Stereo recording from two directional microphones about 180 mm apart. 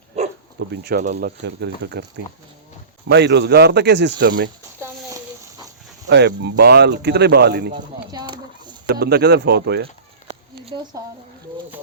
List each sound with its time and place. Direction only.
0.1 s dog: 35° right (ahead or behind)
0.7 s speech: 60° right (ahead or behind)
1.5 s speech: 80° right
3.1 s speech: 75° right (ahead or behind)
4.8 s a sound: 20° right (ahead or behind)
6.1 s speech: 70° right (ahead or behind)
8.1 s a sound: 25° right (ahead or behind)
8.9 s speech: 60° right (ahead or behind)
10.9 s speech: 20° right (ahead or behind)